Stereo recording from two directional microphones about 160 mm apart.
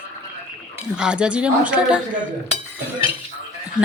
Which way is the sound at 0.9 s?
5° right (ahead or behind).